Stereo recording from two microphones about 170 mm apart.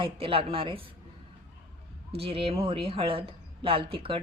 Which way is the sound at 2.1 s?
35° right (ahead or behind).